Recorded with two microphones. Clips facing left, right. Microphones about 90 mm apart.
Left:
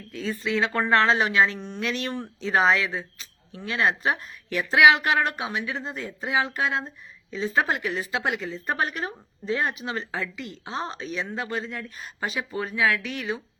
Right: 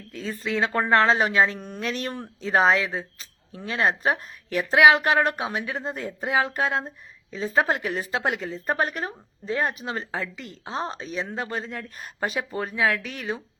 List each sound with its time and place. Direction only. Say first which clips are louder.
0.1 s speech: left 1 dB; 40° right (ahead or behind)